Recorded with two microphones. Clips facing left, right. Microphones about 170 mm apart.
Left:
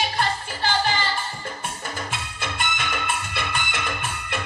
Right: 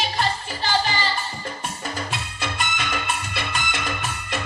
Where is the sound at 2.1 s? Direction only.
50° left (ahead or behind).